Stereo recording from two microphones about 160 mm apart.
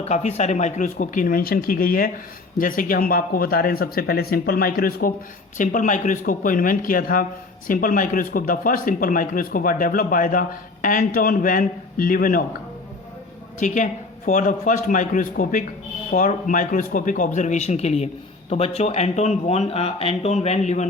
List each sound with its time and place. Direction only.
0.0 s speech: 45° left (ahead or behind); by 5.1 s 70° left (ahead or behind)
5.5 s speech: 55° left (ahead or behind)
13.6 s a man's voice: 50° left (ahead or behind)